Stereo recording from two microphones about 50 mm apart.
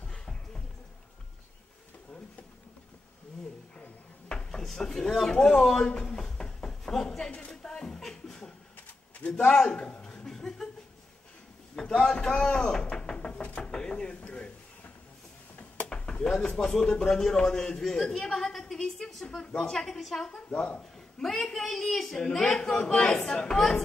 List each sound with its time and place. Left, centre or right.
0.0 s music: centre
4.3 s drawer open or close: centre
5.3 s speech: centre
5.9 s a sound: centre
7.2 s a sound: left
9.4 s speech: centre
9.8 s chuckle: left
11.7 s speech: centre
12.9 s knock: centre
13.6 s drawer open or close: centre
15.9 s speech: centre
20.5 s speech: left
21.2 s speech: centre